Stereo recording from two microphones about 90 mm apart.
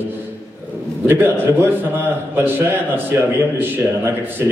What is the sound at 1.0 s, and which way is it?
A man's voice, 25° right (ahead or behind).